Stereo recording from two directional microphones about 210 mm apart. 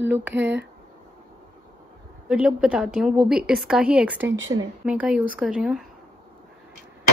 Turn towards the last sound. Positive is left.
turn(degrees=0)  # may be behind; listen again after turning